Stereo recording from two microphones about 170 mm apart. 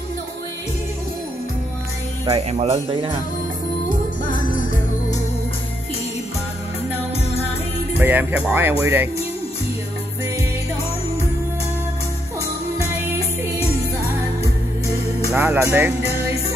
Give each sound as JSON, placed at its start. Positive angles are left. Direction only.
{"t": 2.2, "sound": "speech", "side_deg": -35}
{"t": 4.2, "sound": "music", "side_deg": 50}
{"t": 8.0, "sound": "speech", "side_deg": -10}
{"t": 15.3, "sound": "speech", "side_deg": -10}